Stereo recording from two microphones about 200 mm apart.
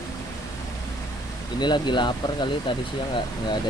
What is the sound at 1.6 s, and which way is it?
Speech, 20° left (ahead or behind).